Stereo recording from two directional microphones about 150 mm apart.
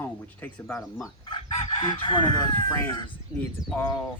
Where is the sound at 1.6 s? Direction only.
30° left (ahead or behind).